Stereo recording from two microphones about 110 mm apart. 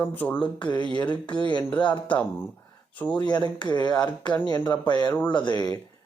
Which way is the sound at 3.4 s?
40° left (ahead or behind).